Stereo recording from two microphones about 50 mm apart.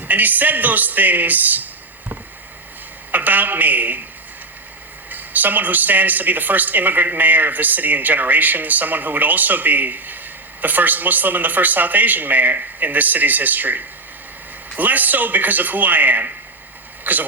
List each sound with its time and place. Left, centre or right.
0.0 s speech: right
3.1 s speech: right
5.1 s speech: right
17.0 s vehicle: right